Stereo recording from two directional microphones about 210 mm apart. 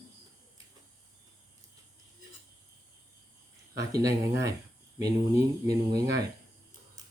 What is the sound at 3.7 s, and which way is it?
Speech, 15° right (ahead or behind).